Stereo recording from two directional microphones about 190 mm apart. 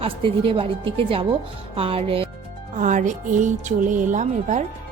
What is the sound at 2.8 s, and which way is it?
Speech, 40° right (ahead or behind).